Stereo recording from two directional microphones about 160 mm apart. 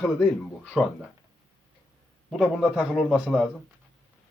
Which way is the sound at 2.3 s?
Centre (ahead or behind).